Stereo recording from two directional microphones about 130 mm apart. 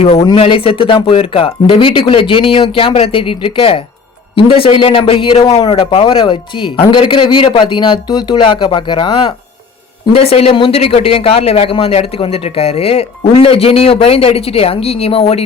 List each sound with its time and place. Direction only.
0.0 s a man's voice: 50° left (ahead or behind)
10.1 s speech: 50° left (ahead or behind)